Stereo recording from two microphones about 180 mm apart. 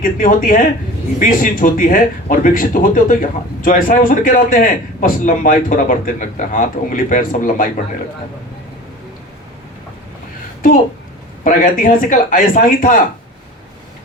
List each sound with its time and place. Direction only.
0.0 s speech: 50° left (ahead or behind)
11.4 s speech: 50° left (ahead or behind)